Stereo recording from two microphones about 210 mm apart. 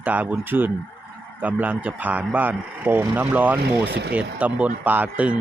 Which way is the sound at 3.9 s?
50° right (ahead or behind).